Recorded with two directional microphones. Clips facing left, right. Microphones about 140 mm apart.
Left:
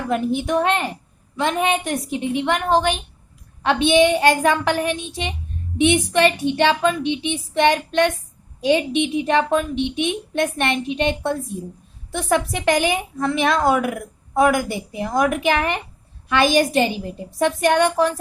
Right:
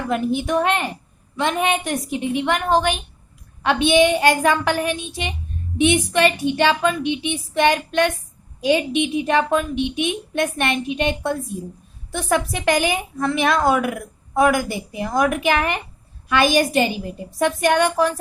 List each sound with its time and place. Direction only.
0.1 s a woman's voice: 25° left (ahead or behind)